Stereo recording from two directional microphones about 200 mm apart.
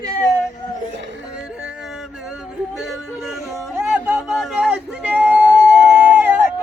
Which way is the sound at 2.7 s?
Centre (ahead or behind).